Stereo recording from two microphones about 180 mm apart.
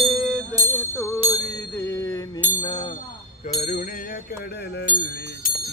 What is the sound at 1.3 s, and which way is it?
Bicycle bell, 15° left (ahead or behind).